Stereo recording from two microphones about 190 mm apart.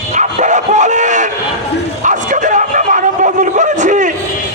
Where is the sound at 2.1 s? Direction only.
40° right (ahead or behind).